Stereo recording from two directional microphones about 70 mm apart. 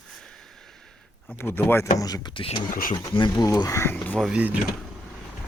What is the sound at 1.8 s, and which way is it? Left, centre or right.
Speech, left.